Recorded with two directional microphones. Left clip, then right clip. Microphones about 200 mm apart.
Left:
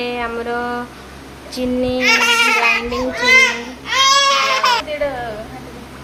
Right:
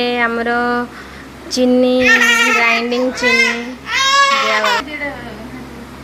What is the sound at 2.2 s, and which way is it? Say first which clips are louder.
Speech: right 2 dB; 55° left (ahead or behind).